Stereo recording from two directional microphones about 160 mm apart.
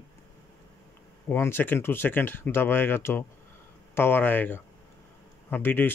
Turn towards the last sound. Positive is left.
turn(degrees=10)  # may be behind; listen again after turning